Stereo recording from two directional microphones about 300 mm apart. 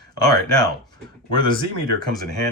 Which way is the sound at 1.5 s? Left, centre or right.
Centre.